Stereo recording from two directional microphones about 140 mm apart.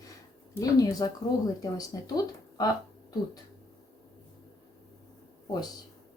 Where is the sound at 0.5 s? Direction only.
25° left (ahead or behind).